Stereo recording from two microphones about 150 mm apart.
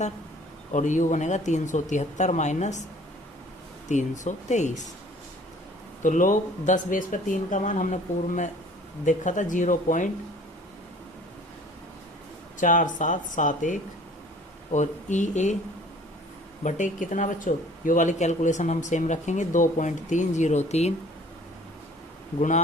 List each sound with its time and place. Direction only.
0.7 s speech: 55° left (ahead or behind)
3.8 s speech: 55° left (ahead or behind)
6.0 s speech: 60° left (ahead or behind)
9.0 s speech: 55° left (ahead or behind)
12.5 s speech: 60° left (ahead or behind)
16.6 s speech: 55° left (ahead or behind)
22.4 s speech: 55° left (ahead or behind)